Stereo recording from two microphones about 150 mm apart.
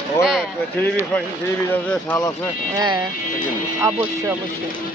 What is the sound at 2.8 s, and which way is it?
Speech, 25° right (ahead or behind).